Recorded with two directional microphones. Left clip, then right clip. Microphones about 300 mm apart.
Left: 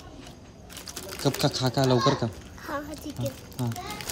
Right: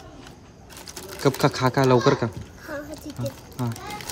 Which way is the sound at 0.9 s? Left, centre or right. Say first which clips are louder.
Right 1 dB; centre.